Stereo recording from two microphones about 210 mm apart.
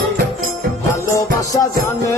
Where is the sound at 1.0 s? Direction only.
15° left (ahead or behind).